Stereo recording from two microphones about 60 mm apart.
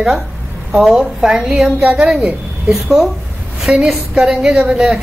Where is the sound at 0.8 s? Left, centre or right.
Centre.